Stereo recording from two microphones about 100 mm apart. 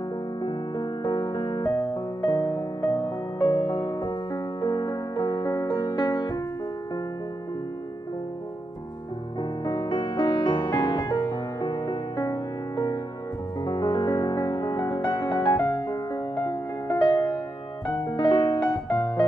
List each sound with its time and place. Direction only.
0.4 s music: 45° left (ahead or behind)
9.4 s music: 50° left (ahead or behind)
15.6 s music: 50° left (ahead or behind)